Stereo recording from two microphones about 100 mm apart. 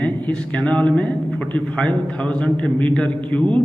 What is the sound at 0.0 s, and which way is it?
A man's voice, 10° left (ahead or behind).